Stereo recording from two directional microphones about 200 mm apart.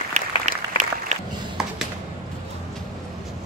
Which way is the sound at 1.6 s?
5° right (ahead or behind).